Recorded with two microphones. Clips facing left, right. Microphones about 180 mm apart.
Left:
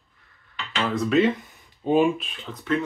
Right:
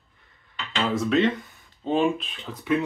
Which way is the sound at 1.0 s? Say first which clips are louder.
Left 2 dB; centre (ahead or behind).